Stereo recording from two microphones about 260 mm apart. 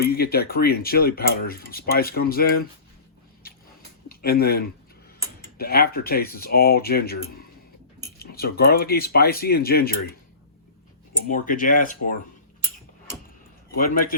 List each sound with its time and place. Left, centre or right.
0.0 s speech: left
4.1 s speech: left
11.3 s speech: left
13.7 s speech: left